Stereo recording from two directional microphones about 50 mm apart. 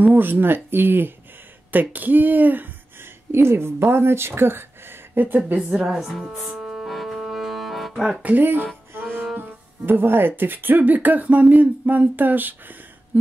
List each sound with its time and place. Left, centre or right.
0.0 s speech: right
3.3 s speech: right
4.4 s a sound: right
5.9 s speech: centre
6.6 s music: centre
7.9 s speech: centre
8.2 s speech: right